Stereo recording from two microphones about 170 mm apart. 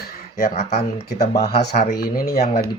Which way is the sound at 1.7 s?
65° left (ahead or behind).